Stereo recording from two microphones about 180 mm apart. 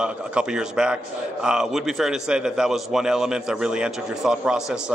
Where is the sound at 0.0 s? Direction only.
5° right (ahead or behind).